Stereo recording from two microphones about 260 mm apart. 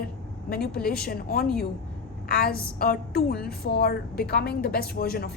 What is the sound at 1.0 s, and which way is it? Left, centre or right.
Speech, left.